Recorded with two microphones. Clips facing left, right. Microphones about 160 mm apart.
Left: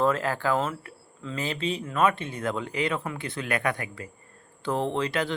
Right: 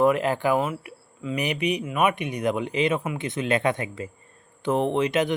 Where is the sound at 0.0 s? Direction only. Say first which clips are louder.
Right 4 dB; 15° right (ahead or behind).